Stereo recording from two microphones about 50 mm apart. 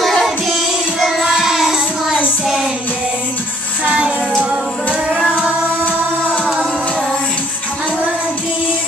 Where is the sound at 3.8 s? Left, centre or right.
Right.